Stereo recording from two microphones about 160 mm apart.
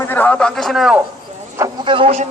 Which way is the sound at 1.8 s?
30° right (ahead or behind).